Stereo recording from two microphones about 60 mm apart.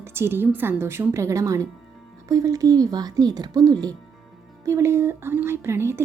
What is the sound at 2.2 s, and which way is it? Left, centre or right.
Speech, right.